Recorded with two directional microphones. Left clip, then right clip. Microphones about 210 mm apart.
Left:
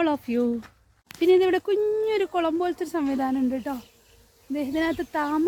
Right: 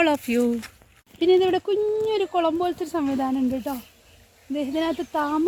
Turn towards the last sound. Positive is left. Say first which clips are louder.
# right 1 dB
turn(degrees=-10)  # may be behind; listen again after turning